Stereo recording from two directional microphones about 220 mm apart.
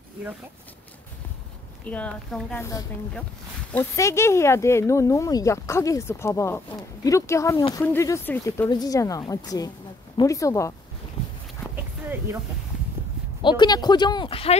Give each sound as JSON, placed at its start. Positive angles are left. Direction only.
{"t": 1.9, "sound": "speech", "side_deg": 5}
{"t": 11.7, "sound": "dog", "side_deg": -10}
{"t": 13.4, "sound": "speech", "side_deg": 20}